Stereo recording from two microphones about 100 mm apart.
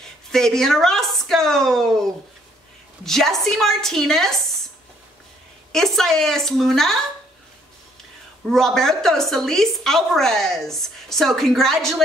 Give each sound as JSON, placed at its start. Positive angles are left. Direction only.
{"t": 0.0, "sound": "speech", "side_deg": 5}
{"t": 3.1, "sound": "a woman's voice", "side_deg": 5}
{"t": 5.7, "sound": "a woman's voice", "side_deg": 5}
{"t": 8.5, "sound": "a woman's voice", "side_deg": 5}